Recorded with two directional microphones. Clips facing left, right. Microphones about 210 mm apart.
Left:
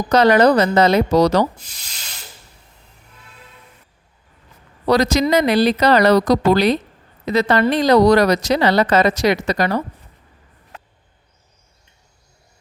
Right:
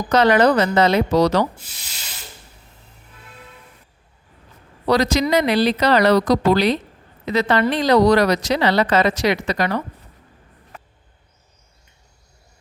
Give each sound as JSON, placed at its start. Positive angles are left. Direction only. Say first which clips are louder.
{"t": 0.1, "sound": "a woman's voice", "louder": "left 2 dB", "side_deg": 40}
{"t": 4.9, "sound": "speech", "louder": "left 2 dB", "side_deg": 45}